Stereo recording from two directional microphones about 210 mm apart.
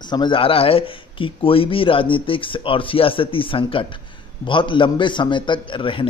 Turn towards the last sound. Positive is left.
turn(degrees=25)  # may be behind; listen again after turning